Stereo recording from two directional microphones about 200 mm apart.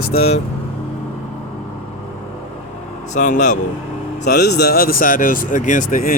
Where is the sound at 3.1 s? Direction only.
40° left (ahead or behind).